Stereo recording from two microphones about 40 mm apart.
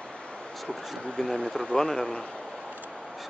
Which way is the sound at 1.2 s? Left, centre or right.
Centre.